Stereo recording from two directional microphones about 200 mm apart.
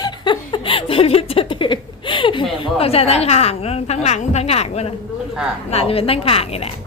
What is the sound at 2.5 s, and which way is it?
A woman's voice, 30° left (ahead or behind).